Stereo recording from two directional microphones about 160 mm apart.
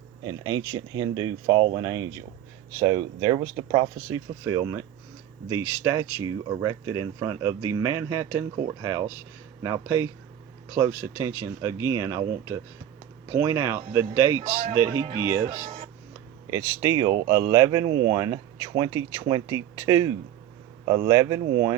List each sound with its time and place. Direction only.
0.3 s speech: 20° right (ahead or behind)
15.4 s speech: 45° right (ahead or behind)
16.5 s speech: 20° right (ahead or behind)